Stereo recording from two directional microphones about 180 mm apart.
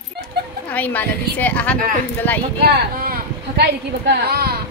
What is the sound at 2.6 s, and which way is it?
Speech, 55° right (ahead or behind).